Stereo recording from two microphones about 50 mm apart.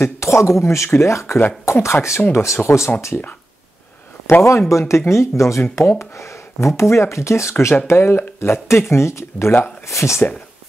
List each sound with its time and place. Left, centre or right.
0.2 s speech: left
4.3 s speech: left
7.8 s speech: left
9.8 s speech: left